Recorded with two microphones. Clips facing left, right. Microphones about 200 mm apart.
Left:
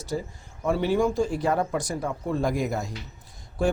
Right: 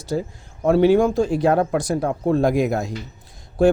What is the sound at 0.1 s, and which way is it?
Speech, 75° right (ahead or behind).